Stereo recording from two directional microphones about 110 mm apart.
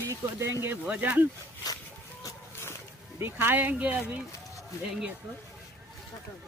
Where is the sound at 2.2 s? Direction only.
25° left (ahead or behind).